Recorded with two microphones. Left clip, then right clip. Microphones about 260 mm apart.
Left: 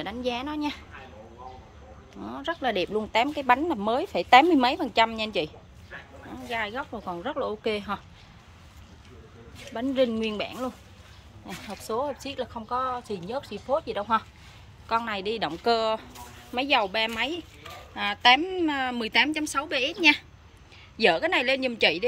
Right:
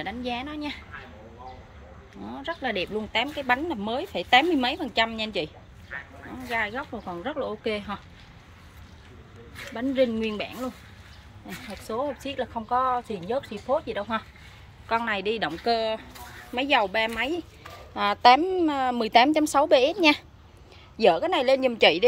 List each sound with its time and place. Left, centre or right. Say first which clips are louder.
0.0 s speech: left 1 dB; centre
2.2 s speech: left 2 dB; centre
6.5 s speech: right 2 dB; centre
9.8 s speech: right 1 dB; centre
17.9 s a woman's voice: right 3 dB; centre